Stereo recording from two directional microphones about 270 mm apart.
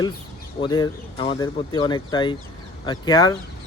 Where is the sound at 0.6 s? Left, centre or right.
Centre.